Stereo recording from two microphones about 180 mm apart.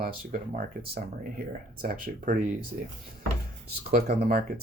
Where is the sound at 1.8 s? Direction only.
55° right (ahead or behind).